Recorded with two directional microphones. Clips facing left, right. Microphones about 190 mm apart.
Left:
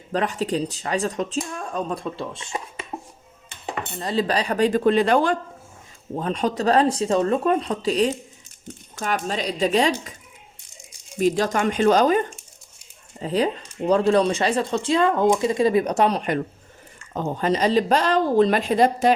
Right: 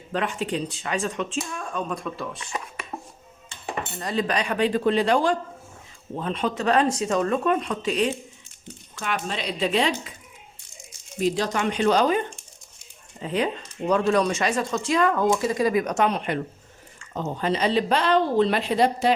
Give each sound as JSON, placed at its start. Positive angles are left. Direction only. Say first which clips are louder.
{"t": 0.1, "sound": "speech", "louder": "left 3 dB", "side_deg": 40}
{"t": 4.0, "sound": "speech", "louder": "left 3 dB", "side_deg": 30}
{"t": 6.1, "sound": "speech", "louder": "left 3 dB", "side_deg": 40}
{"t": 11.2, "sound": "speech", "louder": "left 3 dB", "side_deg": 45}
{"t": 13.2, "sound": "speech", "louder": "left 3 dB", "side_deg": 35}